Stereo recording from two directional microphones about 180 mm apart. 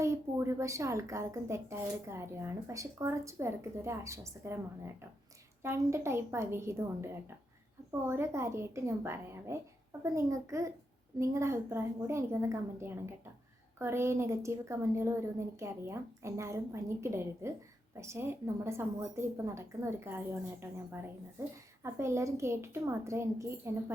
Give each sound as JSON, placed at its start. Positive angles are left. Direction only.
{"t": 0.0, "sound": "a woman's voice", "side_deg": -15}
{"t": 5.6, "sound": "a woman's voice", "side_deg": -15}